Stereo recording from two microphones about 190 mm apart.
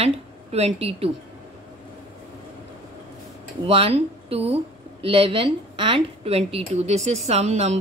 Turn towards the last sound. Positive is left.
turn(degrees=-35)  # may be behind; listen again after turning